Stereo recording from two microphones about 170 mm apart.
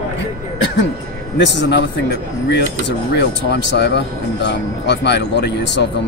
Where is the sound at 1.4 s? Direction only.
90° left.